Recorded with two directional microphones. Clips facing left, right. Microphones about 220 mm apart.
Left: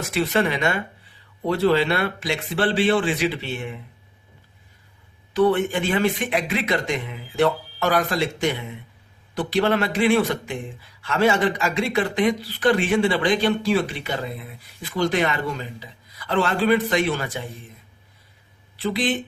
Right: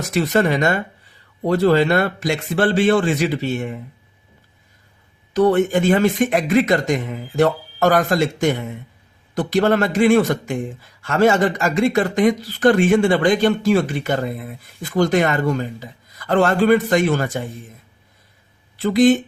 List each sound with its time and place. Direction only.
0.1 s speech: 40° right (ahead or behind)
5.3 s speech: 45° right (ahead or behind)
18.8 s speech: 45° right (ahead or behind)